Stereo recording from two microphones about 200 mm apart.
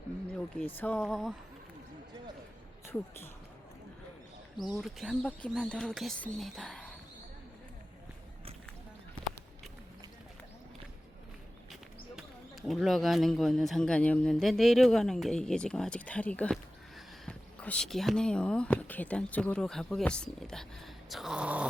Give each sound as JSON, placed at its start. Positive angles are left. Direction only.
{"t": 0.3, "sound": "speech", "side_deg": 5}
{"t": 4.8, "sound": "speech", "side_deg": 0}
{"t": 12.6, "sound": "speech", "side_deg": 0}